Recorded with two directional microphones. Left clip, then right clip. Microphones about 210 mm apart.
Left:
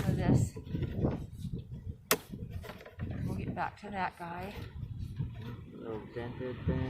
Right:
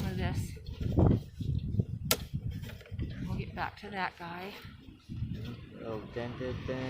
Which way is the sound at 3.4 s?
25° left (ahead or behind).